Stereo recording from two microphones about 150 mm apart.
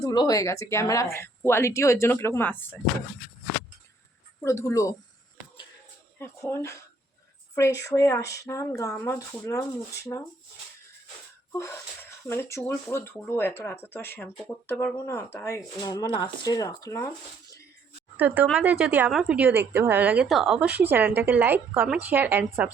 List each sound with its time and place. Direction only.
0.0 s speech: 25° left (ahead or behind)
4.4 s speech: 20° left (ahead or behind)
6.1 s speech: 15° left (ahead or behind)
7.9 s speech: 20° left (ahead or behind)
11.5 s speech: 20° left (ahead or behind)
18.2 s speech: 10° right (ahead or behind)